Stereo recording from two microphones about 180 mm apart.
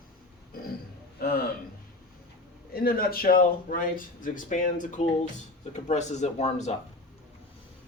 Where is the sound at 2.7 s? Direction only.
55° left (ahead or behind); by 6.7 s 40° left (ahead or behind).